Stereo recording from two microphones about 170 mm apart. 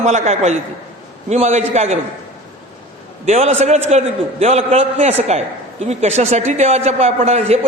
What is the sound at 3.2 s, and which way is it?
A man's voice, 40° right (ahead or behind).